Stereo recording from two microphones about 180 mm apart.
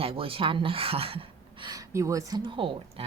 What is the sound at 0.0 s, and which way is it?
Speech, 30° right (ahead or behind).